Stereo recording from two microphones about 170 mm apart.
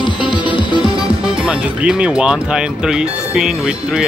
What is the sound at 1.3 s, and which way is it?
Speech, 5° right (ahead or behind).